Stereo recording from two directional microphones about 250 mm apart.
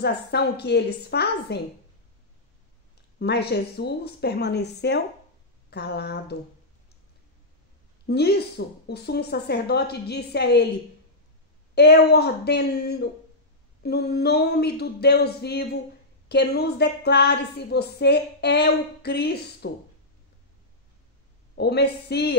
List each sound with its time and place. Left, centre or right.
0.0 s a woman's voice: left
3.2 s a woman's voice: left
8.1 s a woman's voice: left
11.7 s a woman's voice: left
21.5 s a woman's voice: left